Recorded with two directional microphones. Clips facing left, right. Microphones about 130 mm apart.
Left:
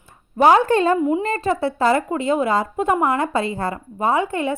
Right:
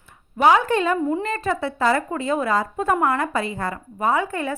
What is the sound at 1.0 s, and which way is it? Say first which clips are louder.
Speech: left 3 dB; 15° left (ahead or behind).